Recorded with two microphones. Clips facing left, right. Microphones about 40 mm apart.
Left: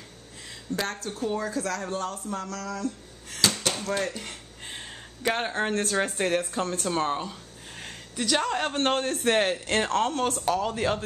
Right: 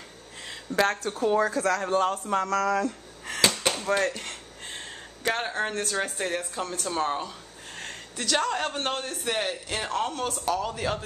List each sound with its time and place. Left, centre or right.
0.5 s speech: right
1.4 s speech: centre
1.9 s a man's voice: right
2.4 s speech: right
3.5 s a sound: centre
4.0 s speech: centre
4.6 s a sound: centre
5.8 s a woman's voice: centre
8.9 s a man's voice: left
10.4 s speech: left